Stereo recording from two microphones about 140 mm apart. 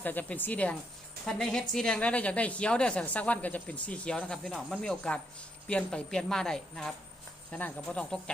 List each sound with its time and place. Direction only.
0.0 s a woman's voice: 10° left (ahead or behind)